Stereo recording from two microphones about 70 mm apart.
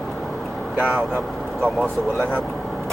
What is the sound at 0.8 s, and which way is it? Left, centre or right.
Speech, right.